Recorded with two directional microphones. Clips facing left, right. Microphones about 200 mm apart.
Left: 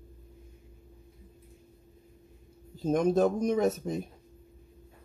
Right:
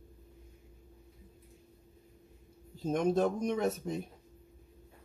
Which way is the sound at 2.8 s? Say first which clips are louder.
Left 4 dB; 40° left (ahead or behind).